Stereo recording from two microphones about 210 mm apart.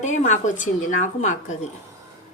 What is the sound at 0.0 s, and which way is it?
A woman's voice, 35° left (ahead or behind).